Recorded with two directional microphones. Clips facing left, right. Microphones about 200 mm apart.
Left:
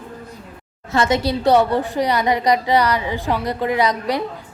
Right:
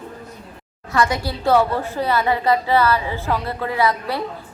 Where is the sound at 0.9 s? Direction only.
20° left (ahead or behind).